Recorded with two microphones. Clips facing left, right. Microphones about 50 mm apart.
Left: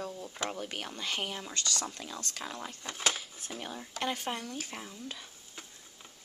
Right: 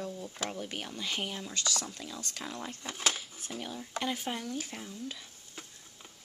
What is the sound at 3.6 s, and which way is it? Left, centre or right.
Speech, centre.